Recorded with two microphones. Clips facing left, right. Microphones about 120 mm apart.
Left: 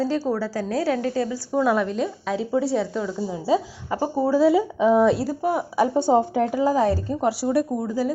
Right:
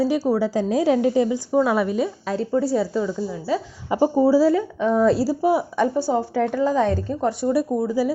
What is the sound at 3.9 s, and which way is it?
Speech, 15° right (ahead or behind).